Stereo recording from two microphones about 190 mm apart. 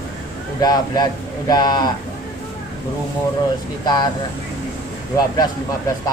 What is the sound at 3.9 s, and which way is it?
Speech, 20° left (ahead or behind).